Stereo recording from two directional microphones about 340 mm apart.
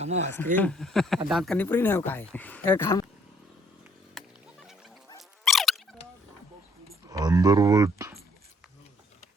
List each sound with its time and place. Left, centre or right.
0.0 s speech: centre
0.5 s speech: centre
4.2 s music: centre
5.0 s dog: centre
7.1 s speech: centre